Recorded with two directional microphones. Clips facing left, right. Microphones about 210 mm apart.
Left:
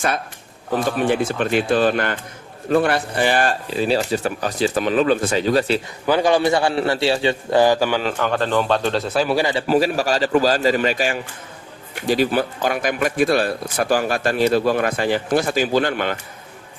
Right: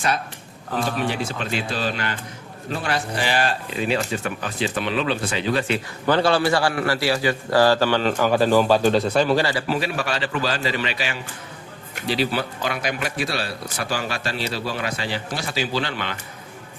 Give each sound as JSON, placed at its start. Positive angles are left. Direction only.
{"t": 0.9, "sound": "speech", "side_deg": 50}
{"t": 3.7, "sound": "speech", "side_deg": 35}
{"t": 6.1, "sound": "a man's voice", "side_deg": 15}
{"t": 8.1, "sound": "speech", "side_deg": -5}
{"t": 9.6, "sound": "speech", "side_deg": 40}